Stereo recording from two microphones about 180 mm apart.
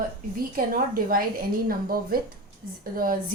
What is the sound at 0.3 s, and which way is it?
A woman's voice, 50° right (ahead or behind).